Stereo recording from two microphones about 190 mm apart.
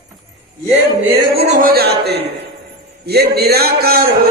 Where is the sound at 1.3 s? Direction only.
45° right (ahead or behind); by 2.2 s 60° right (ahead or behind).